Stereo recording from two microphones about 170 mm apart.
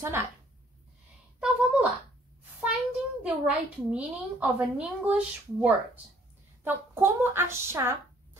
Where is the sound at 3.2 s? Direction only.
5° right (ahead or behind).